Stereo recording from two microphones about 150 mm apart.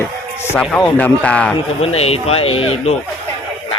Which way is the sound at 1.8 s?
45° left (ahead or behind).